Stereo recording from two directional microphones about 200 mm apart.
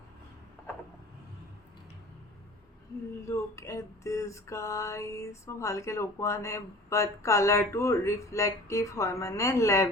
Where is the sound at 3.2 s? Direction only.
15° left (ahead or behind).